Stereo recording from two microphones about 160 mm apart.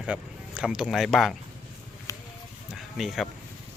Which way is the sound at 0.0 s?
5° right (ahead or behind).